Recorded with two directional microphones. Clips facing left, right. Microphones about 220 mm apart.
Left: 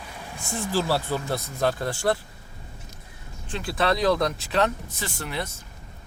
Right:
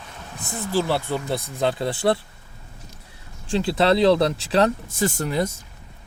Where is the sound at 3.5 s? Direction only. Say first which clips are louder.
Right 6 dB; 25° right (ahead or behind); by 5.5 s 40° right (ahead or behind).